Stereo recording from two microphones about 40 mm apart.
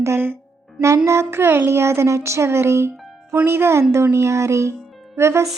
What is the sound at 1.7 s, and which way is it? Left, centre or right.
Speech, right.